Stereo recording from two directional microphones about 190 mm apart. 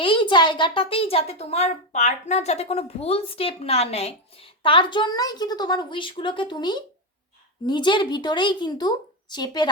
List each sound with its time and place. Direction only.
0.0 s a woman's voice: 25° left (ahead or behind)